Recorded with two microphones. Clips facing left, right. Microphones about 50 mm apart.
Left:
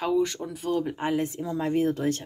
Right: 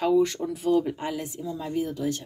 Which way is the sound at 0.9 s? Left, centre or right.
Left.